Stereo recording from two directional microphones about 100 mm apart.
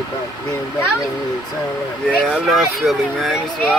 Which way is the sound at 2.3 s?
Centre (ahead or behind).